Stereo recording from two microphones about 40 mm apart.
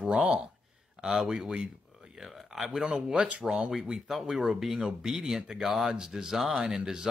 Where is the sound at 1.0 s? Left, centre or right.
Centre.